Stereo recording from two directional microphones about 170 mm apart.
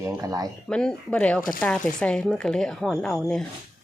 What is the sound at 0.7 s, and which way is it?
Speech, 5° left (ahead or behind).